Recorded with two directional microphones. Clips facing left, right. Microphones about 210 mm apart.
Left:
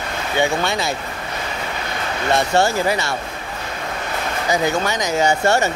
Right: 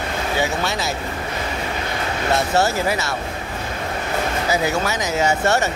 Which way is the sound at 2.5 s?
5° right (ahead or behind).